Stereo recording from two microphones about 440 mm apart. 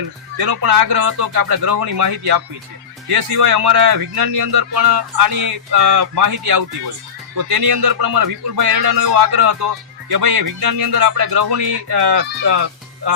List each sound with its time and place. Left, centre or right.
0.3 s speech: right
4.9 s music: right
5.9 s speech: right
10.1 s speech: right